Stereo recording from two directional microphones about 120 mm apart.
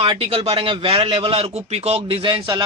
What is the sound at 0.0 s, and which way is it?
A man's voice, 50° right (ahead or behind).